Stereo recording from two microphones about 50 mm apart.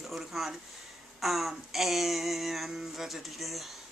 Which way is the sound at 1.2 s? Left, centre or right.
Centre.